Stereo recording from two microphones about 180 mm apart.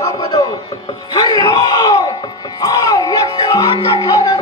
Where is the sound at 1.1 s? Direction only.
20° left (ahead or behind).